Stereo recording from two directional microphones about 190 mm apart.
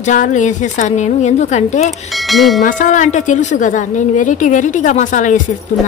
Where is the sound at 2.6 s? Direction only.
40° left (ahead or behind).